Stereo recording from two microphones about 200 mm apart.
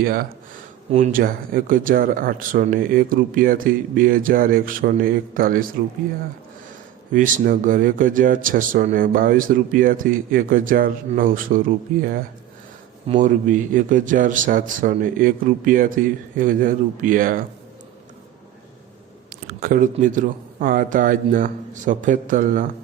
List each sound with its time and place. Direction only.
0.0 s speech: 45° right (ahead or behind)
7.1 s speech: 40° right (ahead or behind)
13.1 s a man's voice: 40° right (ahead or behind)
19.5 s a man's voice: 50° right (ahead or behind)